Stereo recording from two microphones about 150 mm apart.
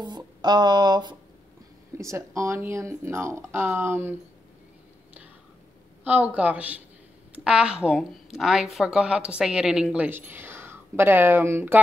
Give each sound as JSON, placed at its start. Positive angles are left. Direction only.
{"t": 0.0, "sound": "speech", "side_deg": -30}
{"t": 6.0, "sound": "a woman's voice", "side_deg": -10}